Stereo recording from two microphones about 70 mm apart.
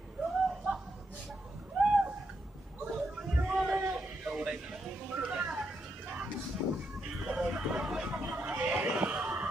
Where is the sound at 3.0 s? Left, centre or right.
Centre.